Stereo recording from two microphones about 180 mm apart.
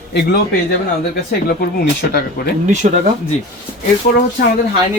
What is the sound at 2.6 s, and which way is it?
Speech, 40° right (ahead or behind).